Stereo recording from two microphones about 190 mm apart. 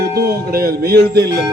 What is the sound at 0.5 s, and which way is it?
Speech, 55° right (ahead or behind).